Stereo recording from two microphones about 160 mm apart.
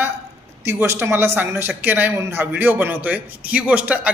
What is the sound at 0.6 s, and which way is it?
Speech, 15° right (ahead or behind).